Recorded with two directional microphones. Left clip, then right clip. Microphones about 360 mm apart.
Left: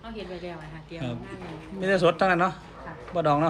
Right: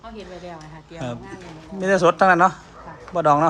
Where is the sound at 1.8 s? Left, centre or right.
Centre.